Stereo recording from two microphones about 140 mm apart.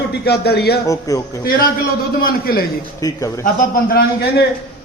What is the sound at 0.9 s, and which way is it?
Speech, 25° left (ahead or behind).